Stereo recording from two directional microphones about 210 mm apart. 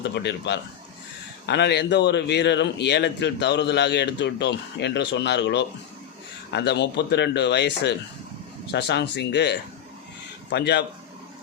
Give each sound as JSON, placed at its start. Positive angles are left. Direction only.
{"t": 0.0, "sound": "a man's voice", "side_deg": 55}